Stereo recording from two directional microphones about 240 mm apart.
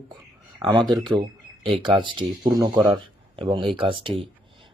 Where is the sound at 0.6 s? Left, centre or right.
Centre.